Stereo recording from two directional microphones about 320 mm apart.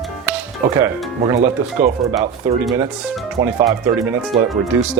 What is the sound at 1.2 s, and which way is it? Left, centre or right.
Speech, centre.